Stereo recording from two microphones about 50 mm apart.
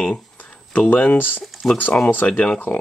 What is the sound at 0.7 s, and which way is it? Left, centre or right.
Speech, left.